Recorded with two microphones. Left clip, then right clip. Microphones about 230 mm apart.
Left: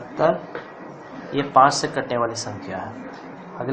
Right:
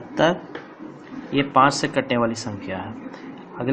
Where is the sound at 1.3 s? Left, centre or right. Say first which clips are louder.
Left 2 dB; right.